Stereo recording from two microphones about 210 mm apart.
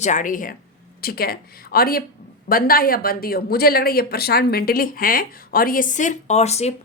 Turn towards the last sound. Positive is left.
turn(degrees=30)  # may be behind; listen again after turning